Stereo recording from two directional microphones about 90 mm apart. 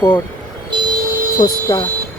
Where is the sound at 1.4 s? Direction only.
50° left (ahead or behind).